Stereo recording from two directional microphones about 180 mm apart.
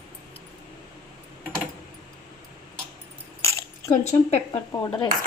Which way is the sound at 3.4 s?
15° left (ahead or behind).